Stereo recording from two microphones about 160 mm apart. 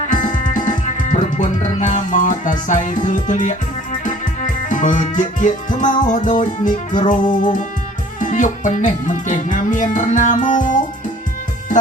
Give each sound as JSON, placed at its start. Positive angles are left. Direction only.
{"t": 0.1, "sound": "music", "side_deg": 55}